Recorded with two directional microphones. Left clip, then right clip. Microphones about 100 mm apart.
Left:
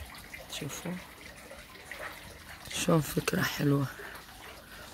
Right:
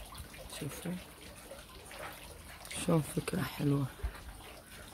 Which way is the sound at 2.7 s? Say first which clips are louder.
Left 5 dB; 30° left (ahead or behind).